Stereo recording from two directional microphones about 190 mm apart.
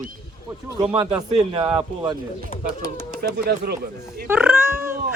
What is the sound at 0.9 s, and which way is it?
Speech, 30° right (ahead or behind).